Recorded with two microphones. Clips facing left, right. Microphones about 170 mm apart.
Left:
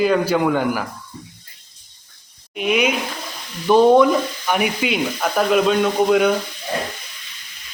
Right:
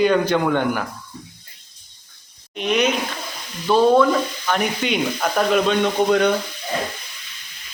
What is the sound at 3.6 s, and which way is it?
Frying, 15° left (ahead or behind).